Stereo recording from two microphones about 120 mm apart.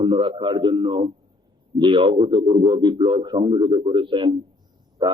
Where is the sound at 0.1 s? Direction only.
40° right (ahead or behind).